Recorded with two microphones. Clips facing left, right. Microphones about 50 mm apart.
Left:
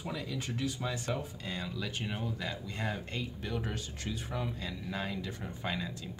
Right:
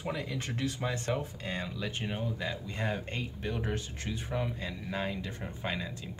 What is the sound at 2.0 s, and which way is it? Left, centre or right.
Speech, centre.